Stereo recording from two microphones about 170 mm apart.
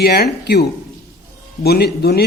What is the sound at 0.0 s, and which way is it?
Speech, 70° left (ahead or behind).